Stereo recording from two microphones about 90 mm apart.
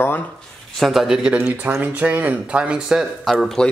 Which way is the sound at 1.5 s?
20° right (ahead or behind).